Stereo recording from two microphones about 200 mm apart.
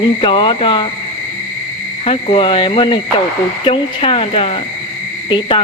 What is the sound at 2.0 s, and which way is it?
Speech, 30° left (ahead or behind).